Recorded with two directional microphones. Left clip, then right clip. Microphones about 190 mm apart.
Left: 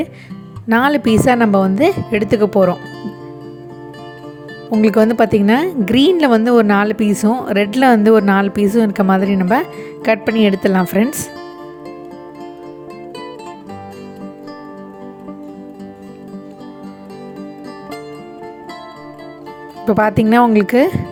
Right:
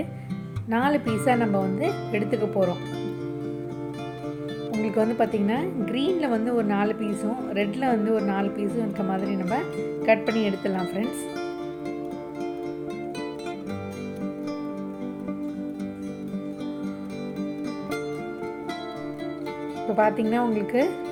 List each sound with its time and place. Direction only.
0.7 s speech: 55° left (ahead or behind)
4.7 s speech: 55° left (ahead or behind)
19.9 s speech: 60° left (ahead or behind)